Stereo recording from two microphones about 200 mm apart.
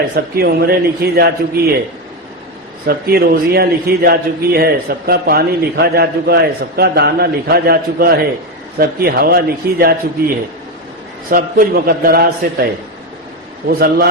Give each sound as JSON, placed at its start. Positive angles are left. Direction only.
{"t": 0.1, "sound": "a man's voice", "side_deg": -50}
{"t": 2.8, "sound": "a man's voice", "side_deg": -50}
{"t": 13.7, "sound": "a man's voice", "side_deg": -50}